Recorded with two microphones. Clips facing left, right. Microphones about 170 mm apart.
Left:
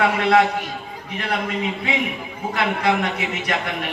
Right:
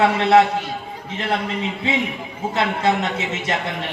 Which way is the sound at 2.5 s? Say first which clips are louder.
Right 1 dB; 25° right (ahead or behind).